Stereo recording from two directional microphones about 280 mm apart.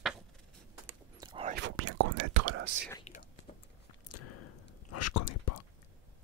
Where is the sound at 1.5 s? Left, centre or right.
Right.